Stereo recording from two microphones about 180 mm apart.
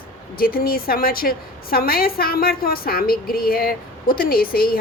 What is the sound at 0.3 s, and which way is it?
A woman's voice, 55° left (ahead or behind).